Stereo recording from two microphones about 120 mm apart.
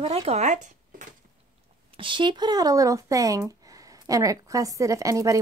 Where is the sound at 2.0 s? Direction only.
40° right (ahead or behind).